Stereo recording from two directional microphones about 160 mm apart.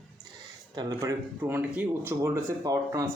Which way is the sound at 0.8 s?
25° right (ahead or behind).